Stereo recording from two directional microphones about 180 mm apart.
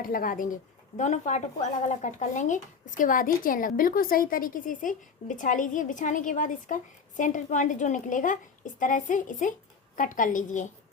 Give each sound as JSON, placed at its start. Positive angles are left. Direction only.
{"t": 0.0, "sound": "a woman's voice", "side_deg": 50}